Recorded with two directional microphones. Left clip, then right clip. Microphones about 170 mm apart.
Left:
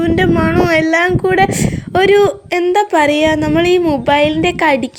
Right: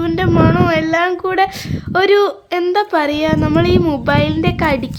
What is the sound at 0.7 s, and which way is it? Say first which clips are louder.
A woman's voice: left 3 dB; 20° left (ahead or behind).